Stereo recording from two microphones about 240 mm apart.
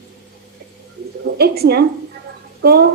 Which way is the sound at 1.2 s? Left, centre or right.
Right.